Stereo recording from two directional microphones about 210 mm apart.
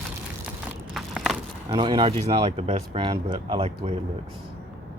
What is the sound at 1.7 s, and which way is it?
Speech, 20° right (ahead or behind).